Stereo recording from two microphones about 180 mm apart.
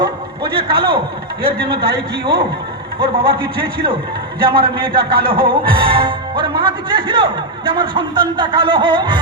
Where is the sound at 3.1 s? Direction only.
30° right (ahead or behind).